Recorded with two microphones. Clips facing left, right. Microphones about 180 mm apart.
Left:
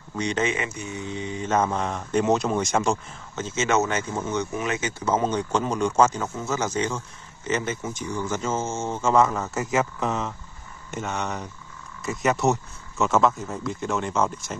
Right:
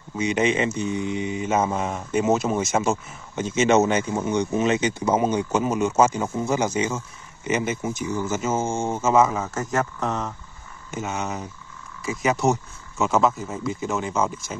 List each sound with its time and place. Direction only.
0.2 s speech: 15° right (ahead or behind)
3.3 s speech: 15° right (ahead or behind)